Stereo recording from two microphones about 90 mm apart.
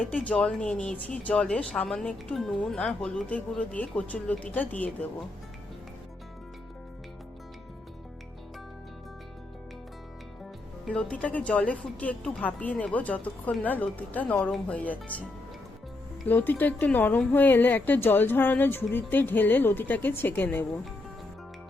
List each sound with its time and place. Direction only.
0.3 s speech: 15° left (ahead or behind)
10.8 s speech: 15° left (ahead or behind)
16.2 s speech: 20° left (ahead or behind)